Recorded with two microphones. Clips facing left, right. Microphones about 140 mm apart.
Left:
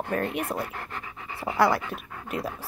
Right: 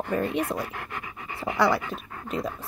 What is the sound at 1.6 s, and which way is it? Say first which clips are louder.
Speech: left 1 dB; centre (ahead or behind).